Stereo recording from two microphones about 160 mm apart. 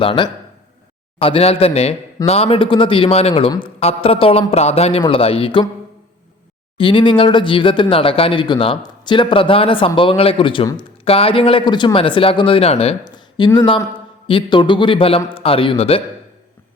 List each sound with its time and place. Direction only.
0.0 s speech: 35° left (ahead or behind)
6.7 s speech: 30° left (ahead or behind)